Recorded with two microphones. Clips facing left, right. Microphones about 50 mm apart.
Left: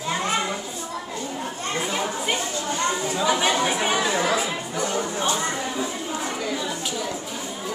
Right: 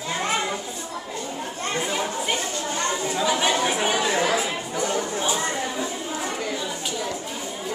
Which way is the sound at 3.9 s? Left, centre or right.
Centre.